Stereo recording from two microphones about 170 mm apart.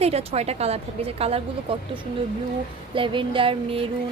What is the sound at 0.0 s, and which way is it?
A woman's voice, 35° right (ahead or behind).